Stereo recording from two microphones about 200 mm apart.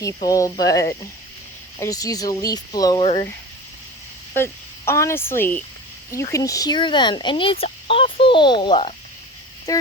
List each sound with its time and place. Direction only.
0.3 s speech: 15° left (ahead or behind)
4.9 s speech: 15° left (ahead or behind)